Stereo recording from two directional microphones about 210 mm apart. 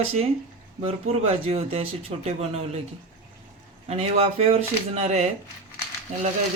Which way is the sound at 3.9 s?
30° right (ahead or behind).